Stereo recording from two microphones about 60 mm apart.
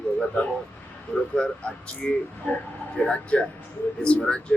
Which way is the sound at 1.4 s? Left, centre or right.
Centre.